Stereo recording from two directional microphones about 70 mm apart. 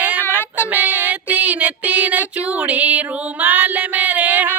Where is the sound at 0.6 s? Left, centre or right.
Right.